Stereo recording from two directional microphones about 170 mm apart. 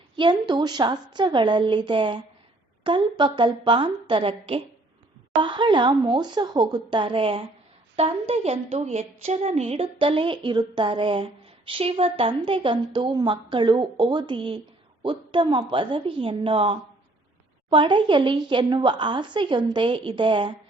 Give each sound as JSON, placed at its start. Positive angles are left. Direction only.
{"t": 0.2, "sound": "a woman's voice", "side_deg": -25}